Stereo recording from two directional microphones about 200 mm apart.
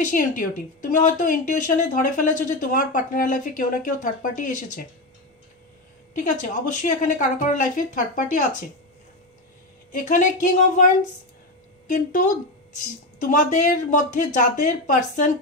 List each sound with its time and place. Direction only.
0.0 s a woman's voice: 40° left (ahead or behind)
6.1 s a woman's voice: 40° left (ahead or behind)
10.0 s a woman's voice: 40° left (ahead or behind)
11.9 s a woman's voice: 40° left (ahead or behind)